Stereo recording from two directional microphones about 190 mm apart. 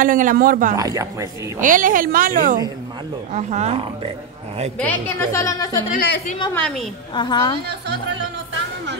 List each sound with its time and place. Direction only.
0.0 s speech: 45° right (ahead or behind)
0.7 s speech: 20° right (ahead or behind)
1.6 s speech: 45° right (ahead or behind)
4.7 s a woman's voice: 10° left (ahead or behind)
5.9 s a woman's voice: 60° left (ahead or behind)
6.5 s a woman's voice: 5° left (ahead or behind)
7.2 s a woman's voice: 25° left (ahead or behind)